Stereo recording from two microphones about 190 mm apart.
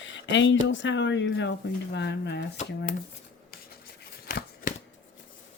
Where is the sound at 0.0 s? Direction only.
75° left (ahead or behind).